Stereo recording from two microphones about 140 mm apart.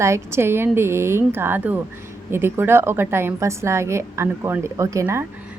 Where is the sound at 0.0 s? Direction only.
20° right (ahead or behind).